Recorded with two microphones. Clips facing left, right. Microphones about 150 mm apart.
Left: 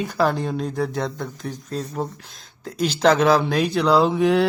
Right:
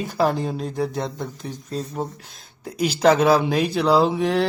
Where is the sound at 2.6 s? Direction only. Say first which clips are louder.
Right 1 dB; 10° right (ahead or behind).